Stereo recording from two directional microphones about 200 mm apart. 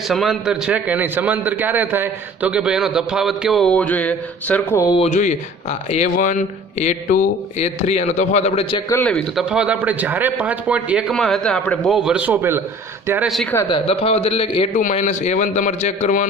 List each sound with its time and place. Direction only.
0.1 s a man's voice: centre (ahead or behind)
4.9 s a man's voice: 35° left (ahead or behind)
8.9 s a man's voice: 5° left (ahead or behind); by 13.3 s 10° right (ahead or behind)
13.3 s a man's voice: 5° left (ahead or behind)
13.6 s a man's voice: 25° left (ahead or behind)
14.8 s a man's voice: 40° left (ahead or behind)